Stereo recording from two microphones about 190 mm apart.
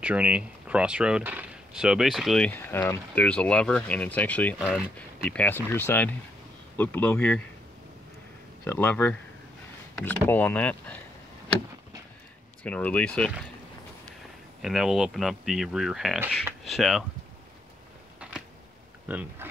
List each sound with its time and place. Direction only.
0.0 s speech: 5° right (ahead or behind); by 4.6 s 10° left (ahead or behind)
4.6 s speech: 5° right (ahead or behind)
4.9 s speech: 10° left (ahead or behind)
8.6 s speech: 10° left (ahead or behind)
12.6 s speech: 5° left (ahead or behind)
14.6 s speech: centre (ahead or behind)
19.0 s speech: 10° right (ahead or behind)